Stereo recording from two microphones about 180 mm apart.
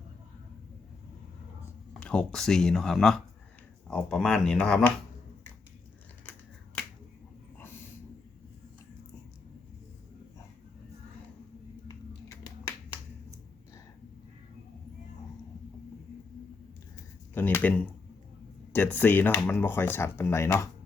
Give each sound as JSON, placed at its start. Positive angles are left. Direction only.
{"t": 2.0, "sound": "speech", "side_deg": 5}
{"t": 11.9, "sound": "finger snapping", "side_deg": 20}
{"t": 17.3, "sound": "a sound", "side_deg": 10}
{"t": 18.7, "sound": "speech", "side_deg": 10}